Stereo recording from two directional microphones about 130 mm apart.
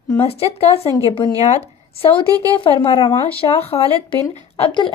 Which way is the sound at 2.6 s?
50° left (ahead or behind).